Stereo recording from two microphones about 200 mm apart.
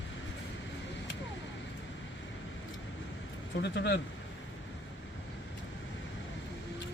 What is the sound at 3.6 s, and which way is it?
Speech, 60° left (ahead or behind).